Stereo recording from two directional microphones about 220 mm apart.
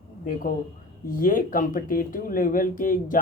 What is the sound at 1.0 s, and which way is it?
Speech, 40° left (ahead or behind).